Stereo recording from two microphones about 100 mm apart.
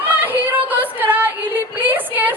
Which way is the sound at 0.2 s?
15° right (ahead or behind).